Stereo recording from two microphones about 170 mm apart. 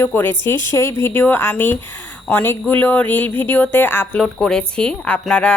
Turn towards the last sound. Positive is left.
turn(degrees=5)  # may be behind; listen again after turning